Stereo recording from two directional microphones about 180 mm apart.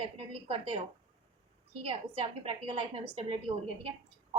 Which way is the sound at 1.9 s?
30° right (ahead or behind).